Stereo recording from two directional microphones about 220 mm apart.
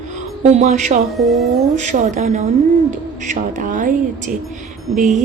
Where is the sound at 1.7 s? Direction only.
35° right (ahead or behind).